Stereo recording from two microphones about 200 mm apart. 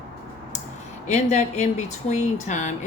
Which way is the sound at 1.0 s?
35° left (ahead or behind).